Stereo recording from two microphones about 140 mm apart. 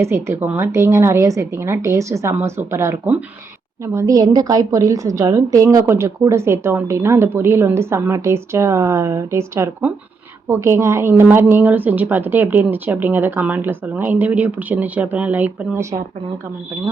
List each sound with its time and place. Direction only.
0.0 s a woman's voice: 20° right (ahead or behind)